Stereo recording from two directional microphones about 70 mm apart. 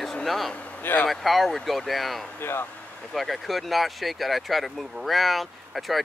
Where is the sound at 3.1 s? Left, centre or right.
Centre.